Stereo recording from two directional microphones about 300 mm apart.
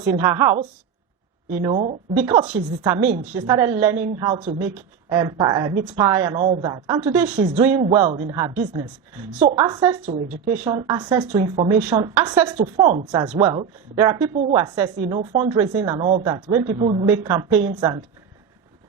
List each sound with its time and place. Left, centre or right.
0.0 s a woman's voice: centre
1.6 s speech: right
3.2 s a woman's voice: centre
7.3 s a woman's voice: right